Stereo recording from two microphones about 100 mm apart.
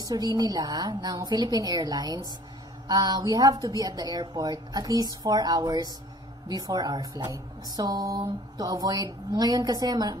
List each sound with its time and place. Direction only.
0.0 s a woman's voice: 40° right (ahead or behind)